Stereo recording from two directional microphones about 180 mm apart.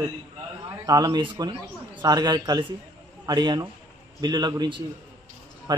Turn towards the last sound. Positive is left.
turn(degrees=-20)  # may be behind; listen again after turning